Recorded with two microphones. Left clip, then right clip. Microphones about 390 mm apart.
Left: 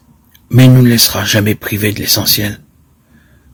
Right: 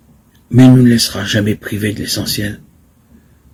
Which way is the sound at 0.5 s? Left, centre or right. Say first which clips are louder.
Even; left.